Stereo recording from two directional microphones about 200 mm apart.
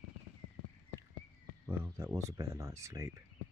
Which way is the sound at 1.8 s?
15° right (ahead or behind).